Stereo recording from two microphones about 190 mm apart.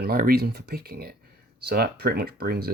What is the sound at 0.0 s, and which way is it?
Speech, 50° right (ahead or behind).